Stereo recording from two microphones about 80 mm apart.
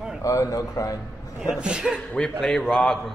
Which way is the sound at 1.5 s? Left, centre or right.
Centre.